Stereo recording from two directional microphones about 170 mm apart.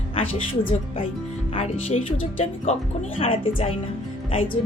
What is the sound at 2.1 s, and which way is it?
Speech, 35° left (ahead or behind).